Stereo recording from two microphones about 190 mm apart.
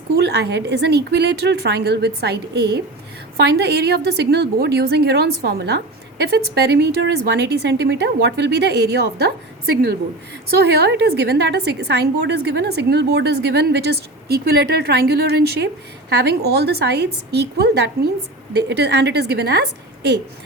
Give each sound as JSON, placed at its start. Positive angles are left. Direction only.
{"t": 0.1, "sound": "a woman's voice", "side_deg": -60}
{"t": 10.5, "sound": "a woman's voice", "side_deg": -60}